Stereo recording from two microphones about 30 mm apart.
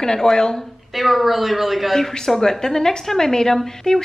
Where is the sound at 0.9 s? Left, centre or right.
Centre.